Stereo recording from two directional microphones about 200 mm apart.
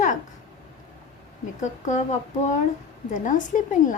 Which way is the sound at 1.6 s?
35° left (ahead or behind).